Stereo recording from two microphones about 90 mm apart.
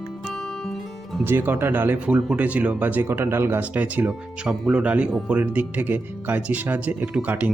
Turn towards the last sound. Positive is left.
turn(degrees=-15)  # may be behind; listen again after turning